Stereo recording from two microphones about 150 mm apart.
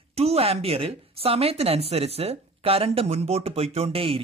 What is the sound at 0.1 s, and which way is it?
A woman's voice, 45° right (ahead or behind).